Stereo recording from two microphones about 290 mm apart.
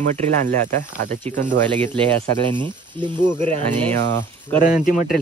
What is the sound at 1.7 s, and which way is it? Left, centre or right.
Speech, centre.